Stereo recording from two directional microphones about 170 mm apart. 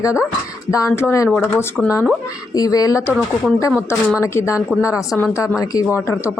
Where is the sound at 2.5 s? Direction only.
20° left (ahead or behind).